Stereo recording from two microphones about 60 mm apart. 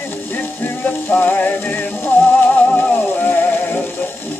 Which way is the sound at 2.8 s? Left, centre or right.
Left.